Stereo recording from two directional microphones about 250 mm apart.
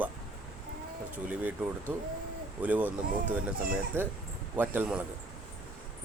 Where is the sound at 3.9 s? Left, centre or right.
Centre.